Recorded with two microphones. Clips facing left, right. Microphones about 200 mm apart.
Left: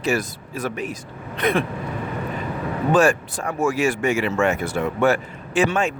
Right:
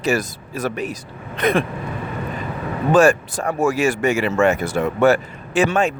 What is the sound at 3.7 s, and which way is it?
Speech, 80° right.